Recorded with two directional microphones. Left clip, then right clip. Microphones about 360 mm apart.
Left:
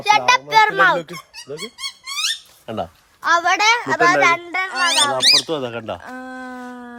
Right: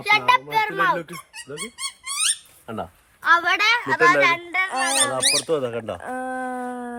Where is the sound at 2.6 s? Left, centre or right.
Left.